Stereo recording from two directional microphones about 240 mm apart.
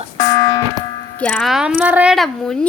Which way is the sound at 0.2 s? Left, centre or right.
Centre.